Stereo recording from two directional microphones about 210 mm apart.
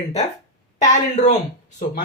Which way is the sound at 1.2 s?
30° left (ahead or behind).